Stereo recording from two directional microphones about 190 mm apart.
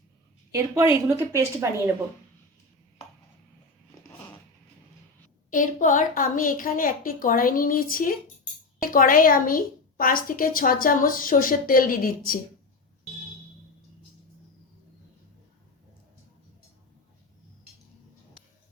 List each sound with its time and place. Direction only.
1.0 s a woman's voice: 10° right (ahead or behind)
5.5 s a woman's voice: 45° left (ahead or behind)